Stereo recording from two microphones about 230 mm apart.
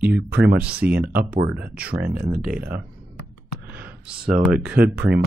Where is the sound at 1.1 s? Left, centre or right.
Right.